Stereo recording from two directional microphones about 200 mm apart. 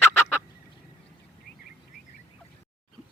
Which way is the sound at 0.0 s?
10° left (ahead or behind).